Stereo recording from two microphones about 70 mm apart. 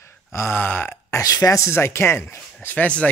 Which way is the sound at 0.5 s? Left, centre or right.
Left.